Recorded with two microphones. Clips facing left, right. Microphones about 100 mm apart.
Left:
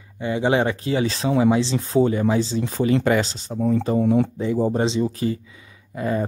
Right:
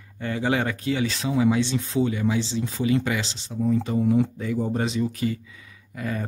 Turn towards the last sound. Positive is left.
turn(degrees=30)  # may be behind; listen again after turning